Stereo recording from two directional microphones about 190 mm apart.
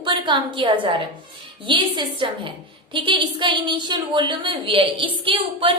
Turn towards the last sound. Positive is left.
turn(degrees=-25)  # may be behind; listen again after turning